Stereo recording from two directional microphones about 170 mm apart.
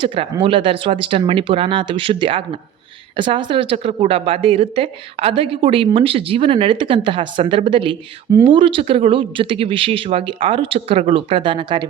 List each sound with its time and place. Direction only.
0.0 s a woman's voice: 30° right (ahead or behind)